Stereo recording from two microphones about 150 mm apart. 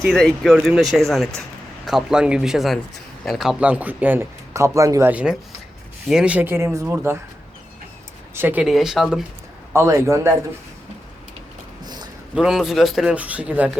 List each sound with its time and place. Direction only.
0.0 s a man's voice: centre (ahead or behind); by 7.2 s 15° right (ahead or behind)
8.4 s speech: 15° right (ahead or behind)
8.6 s a man's voice: 5° right (ahead or behind)
9.7 s a man's voice: 20° right (ahead or behind)
12.3 s a man's voice: 5° right (ahead or behind)